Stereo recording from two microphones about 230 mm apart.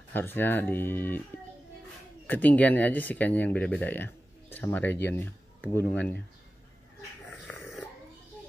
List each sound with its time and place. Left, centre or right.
0.1 s speech: centre
2.2 s speech: centre
7.2 s a sound: centre